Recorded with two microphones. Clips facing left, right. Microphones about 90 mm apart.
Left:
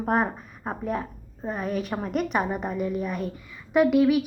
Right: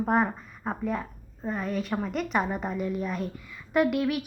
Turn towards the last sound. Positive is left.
turn(degrees=5)  # may be behind; listen again after turning